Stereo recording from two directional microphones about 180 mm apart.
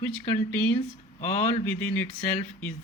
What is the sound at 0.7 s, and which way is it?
Speech, 40° left (ahead or behind).